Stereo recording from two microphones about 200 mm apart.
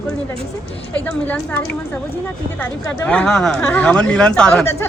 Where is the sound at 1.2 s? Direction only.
5° left (ahead or behind).